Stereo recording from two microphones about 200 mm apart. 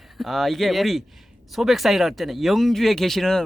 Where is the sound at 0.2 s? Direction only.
Centre (ahead or behind).